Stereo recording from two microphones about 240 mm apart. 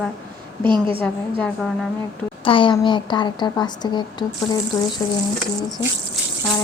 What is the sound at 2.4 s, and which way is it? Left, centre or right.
A woman's voice, left.